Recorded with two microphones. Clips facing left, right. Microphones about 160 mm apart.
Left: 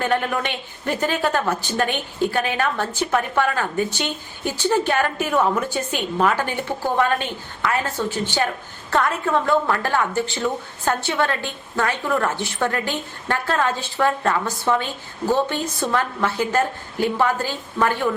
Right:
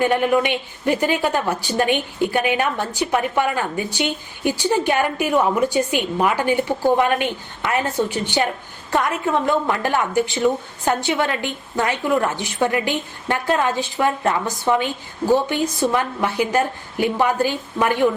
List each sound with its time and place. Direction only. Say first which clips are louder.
0.0 s speech: right 5 dB; 10° right (ahead or behind)